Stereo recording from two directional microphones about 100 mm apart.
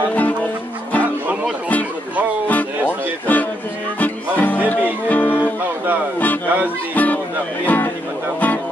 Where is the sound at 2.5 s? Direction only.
15° left (ahead or behind).